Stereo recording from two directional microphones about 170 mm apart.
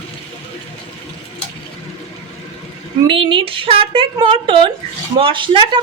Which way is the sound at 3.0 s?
30° right (ahead or behind).